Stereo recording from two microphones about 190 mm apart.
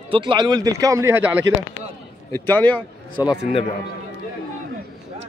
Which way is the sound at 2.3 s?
10° left (ahead or behind).